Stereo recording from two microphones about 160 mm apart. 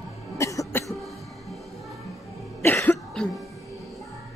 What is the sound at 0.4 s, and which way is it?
Cough, 20° left (ahead or behind).